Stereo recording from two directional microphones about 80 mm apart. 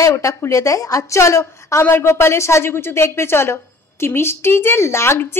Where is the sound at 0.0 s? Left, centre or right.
Left.